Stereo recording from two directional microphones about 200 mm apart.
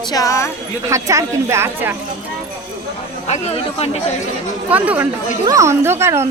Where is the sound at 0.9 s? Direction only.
15° right (ahead or behind).